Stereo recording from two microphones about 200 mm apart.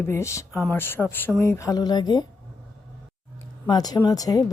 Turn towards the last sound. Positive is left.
turn(degrees=20)  # may be behind; listen again after turning